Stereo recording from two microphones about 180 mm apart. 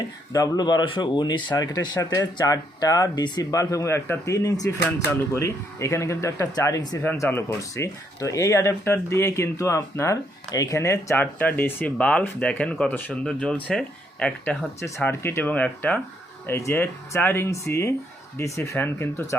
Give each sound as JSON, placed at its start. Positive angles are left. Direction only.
{"t": 0.3, "sound": "speech", "side_deg": 20}